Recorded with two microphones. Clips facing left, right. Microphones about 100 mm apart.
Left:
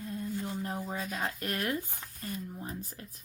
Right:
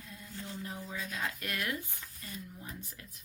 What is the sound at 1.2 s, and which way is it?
Speech, 35° left (ahead or behind).